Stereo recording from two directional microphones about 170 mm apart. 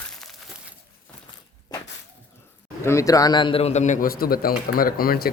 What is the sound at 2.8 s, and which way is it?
A man's voice, 15° left (ahead or behind).